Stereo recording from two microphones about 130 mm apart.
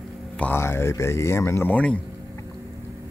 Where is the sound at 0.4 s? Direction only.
15° left (ahead or behind).